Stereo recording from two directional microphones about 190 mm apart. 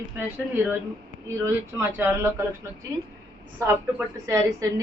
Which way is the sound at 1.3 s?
10° right (ahead or behind).